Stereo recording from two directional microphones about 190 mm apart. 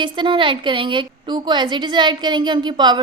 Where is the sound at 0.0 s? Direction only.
25° right (ahead or behind).